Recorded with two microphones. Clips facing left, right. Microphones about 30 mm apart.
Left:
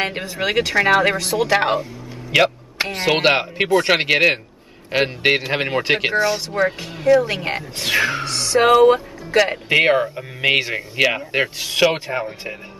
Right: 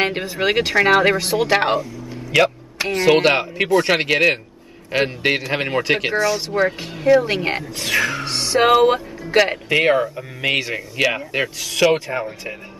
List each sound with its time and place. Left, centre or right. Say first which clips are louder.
0.0 s speech: right 3 dB; centre
2.3 s speech: even; centre
6.5 s speech: right 1 dB; centre
7.8 s music: left 1 dB; centre
8.3 s speech: even; centre
9.7 s speech: left 1 dB; centre